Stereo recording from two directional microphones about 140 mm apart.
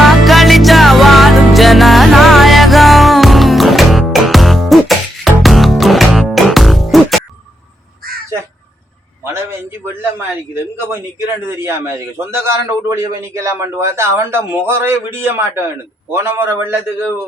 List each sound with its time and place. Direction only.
0.0 s music: centre (ahead or behind)
9.2 s a sound: 20° right (ahead or behind)
11.3 s a man's voice: 20° right (ahead or behind)